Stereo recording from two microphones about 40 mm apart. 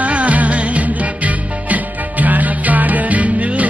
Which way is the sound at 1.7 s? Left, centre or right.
Right.